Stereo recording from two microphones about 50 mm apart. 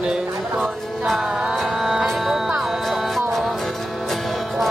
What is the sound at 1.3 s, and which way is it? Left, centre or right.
Music, right.